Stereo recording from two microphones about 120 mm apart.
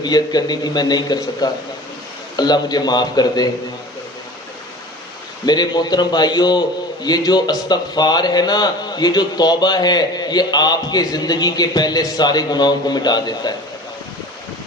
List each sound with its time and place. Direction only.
0.0 s a man's voice: 35° left (ahead or behind)
5.5 s a man's voice: 35° left (ahead or behind)